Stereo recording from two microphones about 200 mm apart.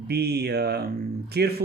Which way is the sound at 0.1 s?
50° right (ahead or behind).